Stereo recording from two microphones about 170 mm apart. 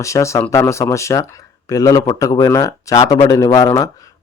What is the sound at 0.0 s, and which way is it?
A man's voice, 15° left (ahead or behind).